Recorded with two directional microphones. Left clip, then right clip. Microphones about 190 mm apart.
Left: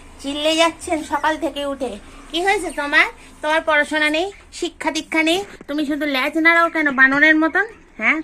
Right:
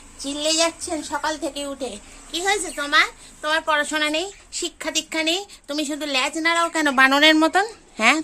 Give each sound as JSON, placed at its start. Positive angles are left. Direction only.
{"t": 0.2, "sound": "a woman's voice", "side_deg": 0}
{"t": 5.6, "sound": "a woman's voice", "side_deg": -20}
{"t": 6.0, "sound": "a woman's voice", "side_deg": -10}
{"t": 6.8, "sound": "speech", "side_deg": -45}
{"t": 7.3, "sound": "speech", "side_deg": -35}
{"t": 7.9, "sound": "speech", "side_deg": -60}